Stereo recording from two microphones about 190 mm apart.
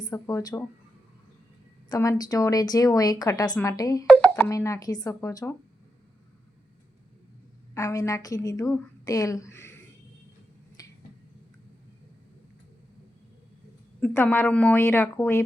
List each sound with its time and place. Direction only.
0.0 s speech: 20° left (ahead or behind)
1.9 s speech: 20° left (ahead or behind)
4.0 s a sound: 5° left (ahead or behind)
4.4 s speech: 15° left (ahead or behind)
7.7 s a woman's voice: 15° left (ahead or behind)
10.8 s finger snapping: 20° left (ahead or behind)
14.0 s a woman's voice: 10° left (ahead or behind)